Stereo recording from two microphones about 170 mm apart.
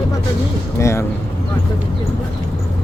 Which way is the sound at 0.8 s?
15° left (ahead or behind).